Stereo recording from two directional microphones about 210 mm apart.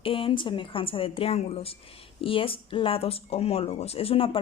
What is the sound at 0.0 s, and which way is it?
Speech, 25° left (ahead or behind).